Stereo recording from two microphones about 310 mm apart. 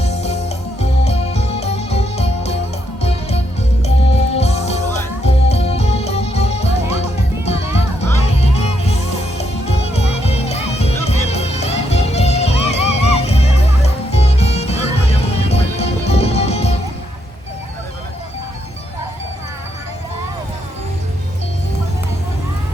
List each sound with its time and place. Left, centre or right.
0.0 s music: left